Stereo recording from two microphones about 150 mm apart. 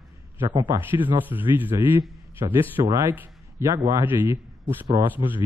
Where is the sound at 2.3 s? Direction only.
15° right (ahead or behind).